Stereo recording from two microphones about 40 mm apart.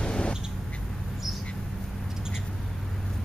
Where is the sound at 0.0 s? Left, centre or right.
Left.